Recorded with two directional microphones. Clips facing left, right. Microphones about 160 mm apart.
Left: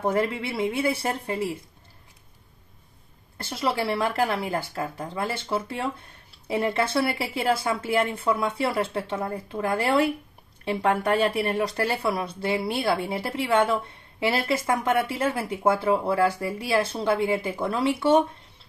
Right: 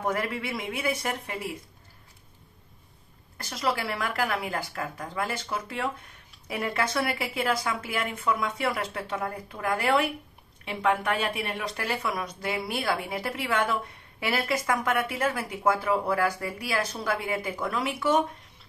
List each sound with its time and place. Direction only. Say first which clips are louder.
0.0 s speech: left 5 dB; 30° left (ahead or behind)
3.3 s speech: left 3 dB; 30° left (ahead or behind)